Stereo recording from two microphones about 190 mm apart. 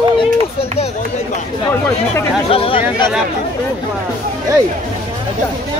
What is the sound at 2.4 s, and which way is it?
Chatter, 30° left (ahead or behind).